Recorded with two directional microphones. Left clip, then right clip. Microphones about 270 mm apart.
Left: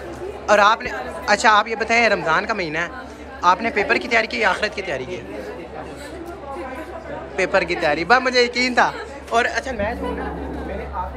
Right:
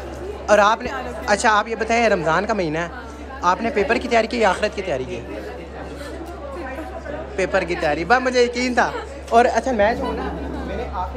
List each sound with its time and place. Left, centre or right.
0.5 s speech: centre
7.3 s speech: centre
9.4 s a woman's voice: right